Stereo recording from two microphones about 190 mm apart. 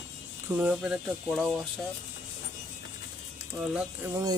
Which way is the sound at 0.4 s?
10° right (ahead or behind).